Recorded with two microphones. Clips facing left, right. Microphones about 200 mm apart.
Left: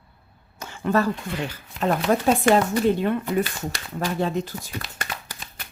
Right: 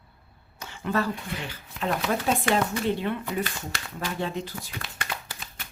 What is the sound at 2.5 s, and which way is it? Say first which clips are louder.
Speech: left 8 dB; 45° left (ahead or behind).